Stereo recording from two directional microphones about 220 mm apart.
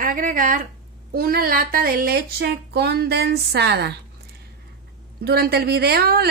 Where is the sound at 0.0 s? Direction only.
40° right (ahead or behind).